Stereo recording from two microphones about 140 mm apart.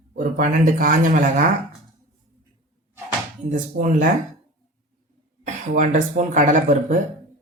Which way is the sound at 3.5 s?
65° right (ahead or behind).